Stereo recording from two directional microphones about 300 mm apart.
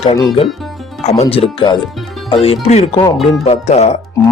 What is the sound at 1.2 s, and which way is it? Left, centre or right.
Speech, centre.